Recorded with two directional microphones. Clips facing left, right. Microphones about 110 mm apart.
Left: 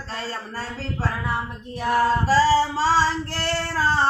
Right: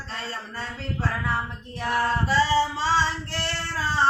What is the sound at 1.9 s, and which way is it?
Female singing, 40° left (ahead or behind).